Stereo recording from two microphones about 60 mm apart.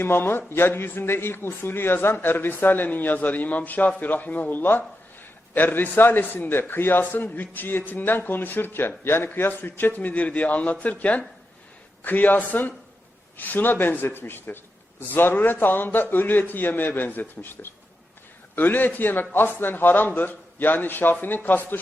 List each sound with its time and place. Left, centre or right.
0.0 s a man's voice: left